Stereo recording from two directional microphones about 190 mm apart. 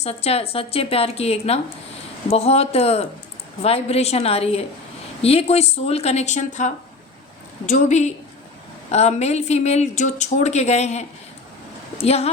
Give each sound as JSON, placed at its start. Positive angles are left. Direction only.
{"t": 0.0, "sound": "a woman's voice", "side_deg": 35}
{"t": 12.0, "sound": "a woman's voice", "side_deg": 35}